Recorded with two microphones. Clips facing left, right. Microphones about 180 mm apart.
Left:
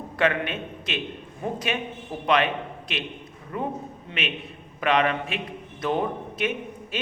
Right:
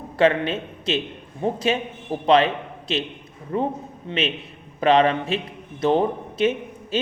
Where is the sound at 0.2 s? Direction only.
30° right (ahead or behind).